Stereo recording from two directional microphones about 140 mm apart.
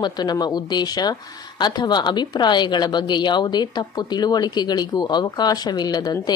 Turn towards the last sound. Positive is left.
turn(degrees=30)  # may be behind; listen again after turning